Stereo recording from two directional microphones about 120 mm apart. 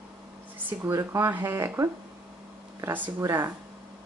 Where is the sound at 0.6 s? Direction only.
25° right (ahead or behind).